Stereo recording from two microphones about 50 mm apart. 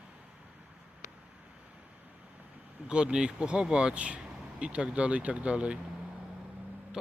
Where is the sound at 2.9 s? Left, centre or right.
Centre.